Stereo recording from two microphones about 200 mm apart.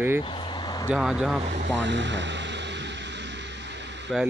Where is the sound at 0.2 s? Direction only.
25° left (ahead or behind).